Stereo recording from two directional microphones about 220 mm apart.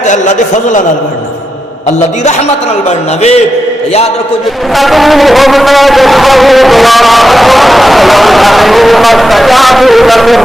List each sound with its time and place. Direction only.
0.1 s a man's voice: 35° left (ahead or behind)
3.2 s a man's voice: 30° left (ahead or behind)
4.7 s a sound: centre (ahead or behind)